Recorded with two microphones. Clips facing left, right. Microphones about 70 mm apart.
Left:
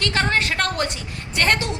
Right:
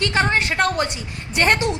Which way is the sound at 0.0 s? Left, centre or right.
Centre.